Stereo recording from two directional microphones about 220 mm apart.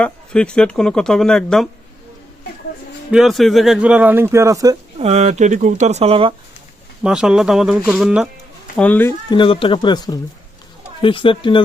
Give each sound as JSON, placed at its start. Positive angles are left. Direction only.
{"t": 0.0, "sound": "speech", "side_deg": 5}
{"t": 3.1, "sound": "speech", "side_deg": 0}
{"t": 4.9, "sound": "speech", "side_deg": -30}
{"t": 7.0, "sound": "speech", "side_deg": -5}
{"t": 9.3, "sound": "speech", "side_deg": 25}